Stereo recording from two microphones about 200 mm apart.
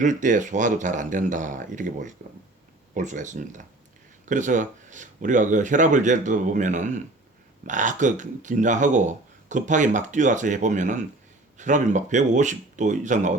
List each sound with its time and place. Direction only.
0.0 s speech: 40° right (ahead or behind)